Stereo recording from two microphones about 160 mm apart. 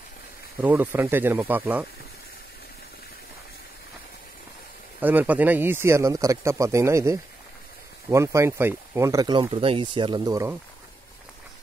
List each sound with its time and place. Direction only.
0.6 s speech: 10° right (ahead or behind)
5.0 s speech: 10° right (ahead or behind)